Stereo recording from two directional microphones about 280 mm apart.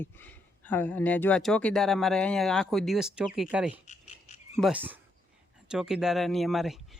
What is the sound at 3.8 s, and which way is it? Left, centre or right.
Frog, left.